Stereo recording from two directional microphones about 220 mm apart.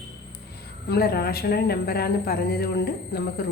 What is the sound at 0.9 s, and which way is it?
Speech, 45° left (ahead or behind).